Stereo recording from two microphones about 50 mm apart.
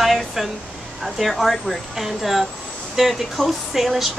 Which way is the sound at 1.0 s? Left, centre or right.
Centre.